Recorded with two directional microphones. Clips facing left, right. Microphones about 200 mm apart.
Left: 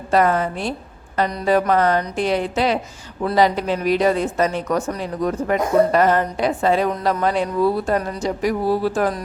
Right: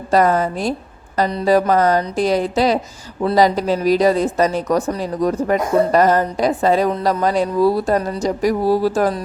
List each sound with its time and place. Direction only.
0.1 s speech: 40° right (ahead or behind)